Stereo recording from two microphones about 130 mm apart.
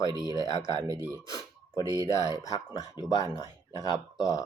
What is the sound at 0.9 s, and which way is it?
Speech, 30° right (ahead or behind).